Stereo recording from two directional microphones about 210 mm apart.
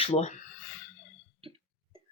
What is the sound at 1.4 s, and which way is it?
Cough, 25° right (ahead or behind).